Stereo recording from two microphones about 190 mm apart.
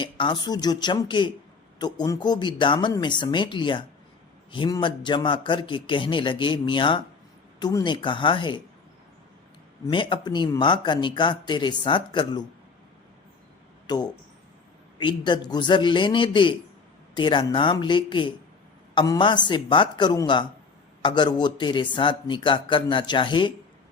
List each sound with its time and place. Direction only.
0.0 s speech: 25° left (ahead or behind)
9.8 s speech: 25° left (ahead or behind)
13.8 s speech: 20° left (ahead or behind)